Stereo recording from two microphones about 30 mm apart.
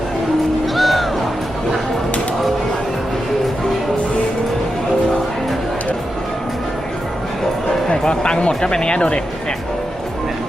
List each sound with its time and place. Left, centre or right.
0.8 s music: centre
7.9 s speech: left